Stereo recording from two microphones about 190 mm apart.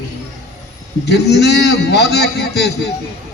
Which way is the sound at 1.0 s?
60° left (ahead or behind).